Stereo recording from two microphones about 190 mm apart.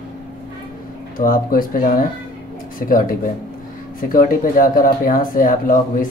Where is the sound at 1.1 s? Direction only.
50° left (ahead or behind).